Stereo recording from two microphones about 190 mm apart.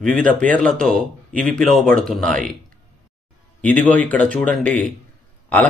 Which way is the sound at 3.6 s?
10° left (ahead or behind).